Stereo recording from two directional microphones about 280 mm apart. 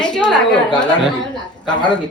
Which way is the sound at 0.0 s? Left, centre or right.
Centre.